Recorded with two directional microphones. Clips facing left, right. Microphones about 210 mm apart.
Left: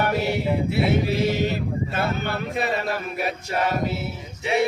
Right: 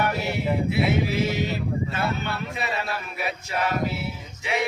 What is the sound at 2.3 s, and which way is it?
Speech, 50° left (ahead or behind).